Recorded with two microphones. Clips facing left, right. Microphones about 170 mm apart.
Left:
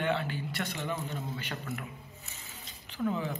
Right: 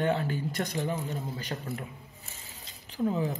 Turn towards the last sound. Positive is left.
turn(degrees=-35)  # may be behind; listen again after turning